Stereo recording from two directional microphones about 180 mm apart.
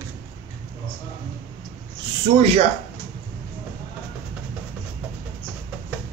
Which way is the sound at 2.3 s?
55° right (ahead or behind).